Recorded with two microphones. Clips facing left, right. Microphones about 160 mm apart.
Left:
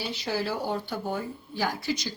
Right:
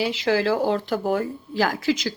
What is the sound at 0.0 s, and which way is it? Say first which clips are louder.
Speech: right 9 dB; 90° right.